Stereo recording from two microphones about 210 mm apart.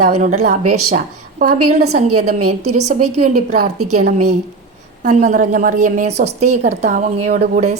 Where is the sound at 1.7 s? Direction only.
35° right (ahead or behind).